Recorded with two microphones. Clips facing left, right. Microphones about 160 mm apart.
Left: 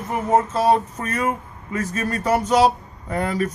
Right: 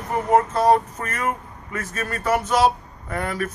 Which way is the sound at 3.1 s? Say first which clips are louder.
Left 4 dB; 20° left (ahead or behind).